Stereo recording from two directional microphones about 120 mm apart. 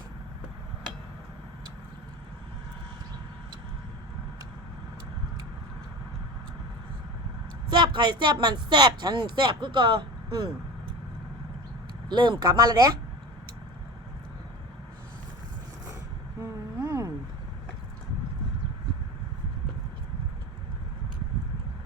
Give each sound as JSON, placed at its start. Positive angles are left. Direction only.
{"t": 7.7, "sound": "speech", "side_deg": -40}
{"t": 12.0, "sound": "speech", "side_deg": -40}
{"t": 16.4, "sound": "a sound", "side_deg": -20}